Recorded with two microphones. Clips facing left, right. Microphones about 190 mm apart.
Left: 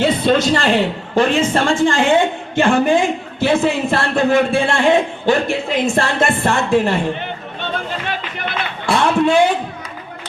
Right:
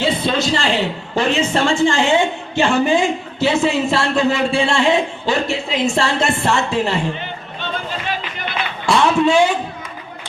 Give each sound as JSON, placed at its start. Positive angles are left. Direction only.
{"t": 0.0, "sound": "a man's voice", "side_deg": 50}
{"t": 9.0, "sound": "a man's voice", "side_deg": 55}